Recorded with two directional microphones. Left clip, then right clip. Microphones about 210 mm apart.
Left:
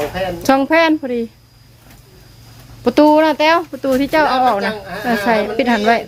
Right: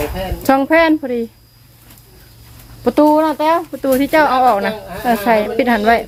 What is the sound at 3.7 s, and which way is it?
Speech, 10° right (ahead or behind).